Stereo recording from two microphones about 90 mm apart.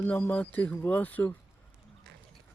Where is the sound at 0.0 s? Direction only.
20° left (ahead or behind).